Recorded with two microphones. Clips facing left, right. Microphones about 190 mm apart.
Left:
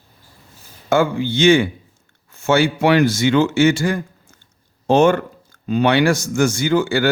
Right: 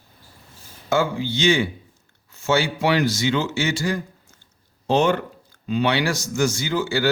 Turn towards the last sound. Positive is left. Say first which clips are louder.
# left 6 dB
turn(degrees=55)  # may be behind; listen again after turning